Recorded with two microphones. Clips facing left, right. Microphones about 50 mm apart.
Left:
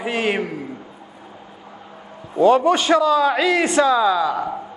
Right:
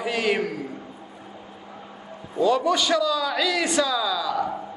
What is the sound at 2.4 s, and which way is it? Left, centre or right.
A man's voice, left.